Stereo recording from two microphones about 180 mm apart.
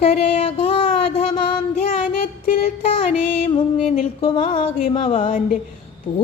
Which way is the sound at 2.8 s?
30° left (ahead or behind).